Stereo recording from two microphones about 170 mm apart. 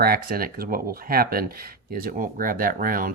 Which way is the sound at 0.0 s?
65° right (ahead or behind).